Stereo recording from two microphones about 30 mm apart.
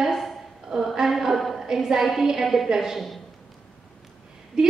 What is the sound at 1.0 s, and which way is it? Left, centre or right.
Speech, centre.